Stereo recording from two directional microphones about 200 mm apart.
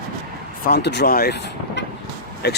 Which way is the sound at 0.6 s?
55° left (ahead or behind).